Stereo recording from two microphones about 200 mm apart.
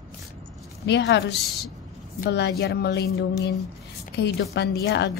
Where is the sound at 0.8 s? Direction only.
60° left (ahead or behind).